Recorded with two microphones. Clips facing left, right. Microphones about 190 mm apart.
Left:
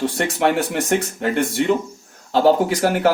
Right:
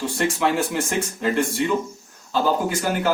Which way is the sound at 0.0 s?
70° left (ahead or behind).